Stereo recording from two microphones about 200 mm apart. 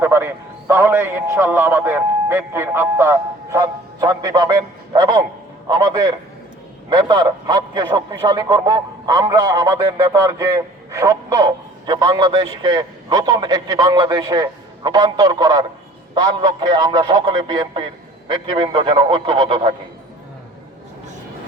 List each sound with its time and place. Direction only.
0.0 s a man's voice: 10° right (ahead or behind)